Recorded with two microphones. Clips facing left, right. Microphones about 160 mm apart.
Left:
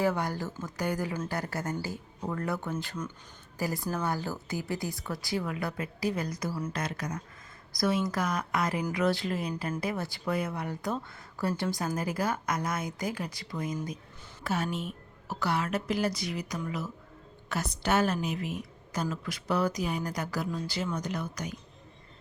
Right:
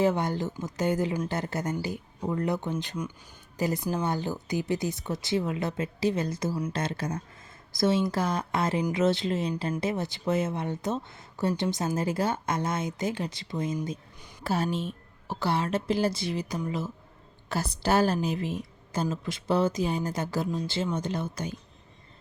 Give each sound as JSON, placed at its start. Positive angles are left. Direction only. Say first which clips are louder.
{"t": 0.0, "sound": "a woman's voice", "louder": "right 4 dB", "side_deg": -20}